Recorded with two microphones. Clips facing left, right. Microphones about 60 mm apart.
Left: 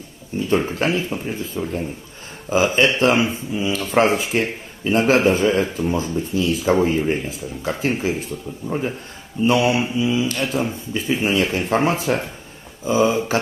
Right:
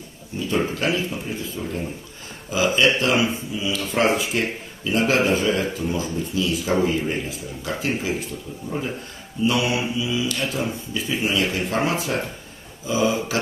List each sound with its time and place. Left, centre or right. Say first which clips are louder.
0.7 s speech: left 2 dB; left
9.4 s speech: left 4 dB; left